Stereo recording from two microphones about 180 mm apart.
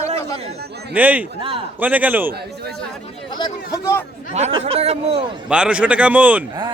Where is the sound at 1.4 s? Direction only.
30° right (ahead or behind).